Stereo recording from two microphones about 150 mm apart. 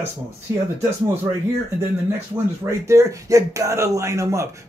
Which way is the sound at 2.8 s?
20° right (ahead or behind).